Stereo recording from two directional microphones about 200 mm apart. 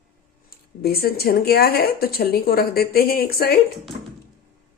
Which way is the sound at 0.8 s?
50° left (ahead or behind).